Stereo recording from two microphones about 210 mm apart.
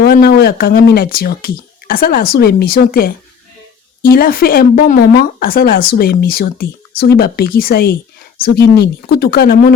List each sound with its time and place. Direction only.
0.0 s speech: 45° left (ahead or behind)